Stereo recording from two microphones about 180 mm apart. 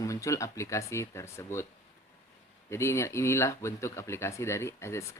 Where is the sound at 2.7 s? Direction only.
15° left (ahead or behind).